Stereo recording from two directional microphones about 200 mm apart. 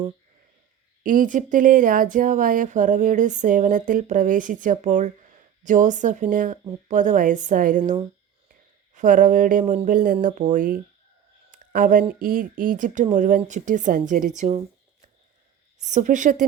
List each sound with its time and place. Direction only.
1.0 s speech: 40° right (ahead or behind)
9.0 s speech: 40° right (ahead or behind)
11.5 s a sound: 45° right (ahead or behind)
12.2 s speech: 45° right (ahead or behind)
15.8 s speech: 35° right (ahead or behind)